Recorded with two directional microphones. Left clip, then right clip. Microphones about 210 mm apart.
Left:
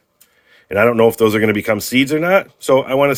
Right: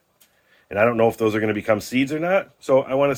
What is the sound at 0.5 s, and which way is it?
Speech, 50° left (ahead or behind).